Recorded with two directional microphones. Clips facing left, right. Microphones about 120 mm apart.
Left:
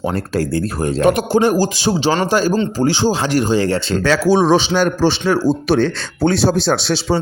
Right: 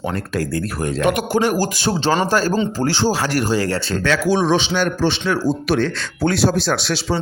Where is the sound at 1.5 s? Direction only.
15° left (ahead or behind).